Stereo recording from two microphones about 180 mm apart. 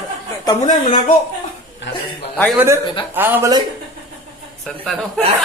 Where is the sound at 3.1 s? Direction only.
10° right (ahead or behind).